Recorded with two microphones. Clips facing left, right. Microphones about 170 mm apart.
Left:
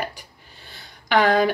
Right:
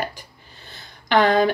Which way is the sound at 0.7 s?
5° left (ahead or behind).